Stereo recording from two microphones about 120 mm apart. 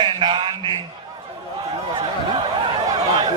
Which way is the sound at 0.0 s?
40° right (ahead or behind).